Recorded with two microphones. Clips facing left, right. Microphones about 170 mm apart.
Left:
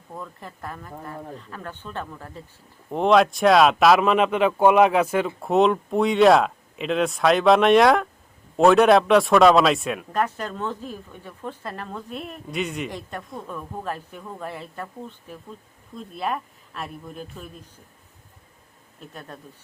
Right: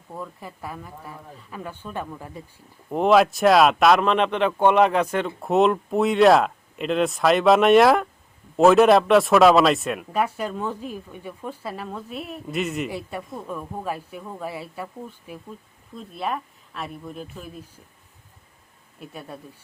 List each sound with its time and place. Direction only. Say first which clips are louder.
0.1 s speech: right 2 dB; 5° right (ahead or behind)
16.0 s speech: even; centre (ahead or behind)
18.9 s speech: right 2 dB; 10° right (ahead or behind)